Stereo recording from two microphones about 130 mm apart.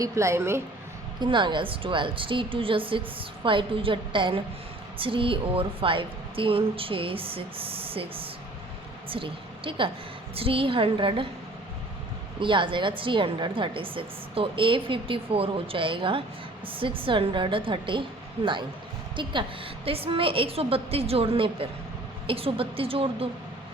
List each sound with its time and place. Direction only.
0.0 s a woman's voice: 20° right (ahead or behind)
1.2 s a woman's voice: 35° right (ahead or behind)
12.4 s a woman's voice: 40° right (ahead or behind)
19.1 s a woman's voice: 40° right (ahead or behind)